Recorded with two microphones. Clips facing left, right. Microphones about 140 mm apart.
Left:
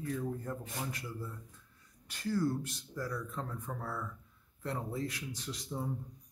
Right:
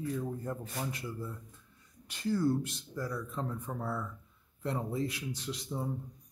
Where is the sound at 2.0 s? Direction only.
20° right (ahead or behind).